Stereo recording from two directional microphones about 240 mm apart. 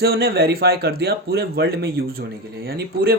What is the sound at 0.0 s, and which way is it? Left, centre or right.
Speech, right.